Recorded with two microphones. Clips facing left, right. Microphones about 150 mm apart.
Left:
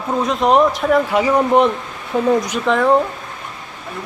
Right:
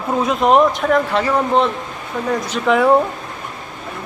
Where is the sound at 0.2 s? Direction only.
Centre (ahead or behind).